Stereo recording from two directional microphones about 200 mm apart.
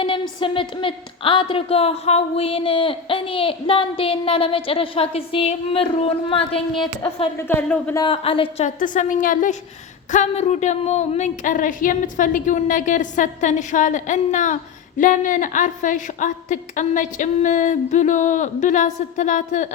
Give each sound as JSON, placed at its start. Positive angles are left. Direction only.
{"t": 0.0, "sound": "speech", "side_deg": 25}
{"t": 7.3, "sound": "speech", "side_deg": 10}
{"t": 8.0, "sound": "a woman's voice", "side_deg": 25}